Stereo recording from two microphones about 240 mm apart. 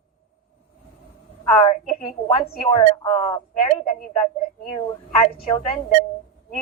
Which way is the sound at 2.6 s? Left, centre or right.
Centre.